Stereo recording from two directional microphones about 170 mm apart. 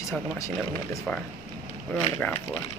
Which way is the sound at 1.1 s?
5° left (ahead or behind).